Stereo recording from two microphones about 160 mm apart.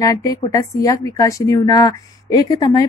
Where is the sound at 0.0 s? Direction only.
20° left (ahead or behind).